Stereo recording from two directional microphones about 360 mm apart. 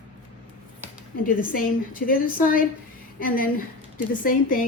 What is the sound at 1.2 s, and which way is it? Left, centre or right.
A woman's voice, left.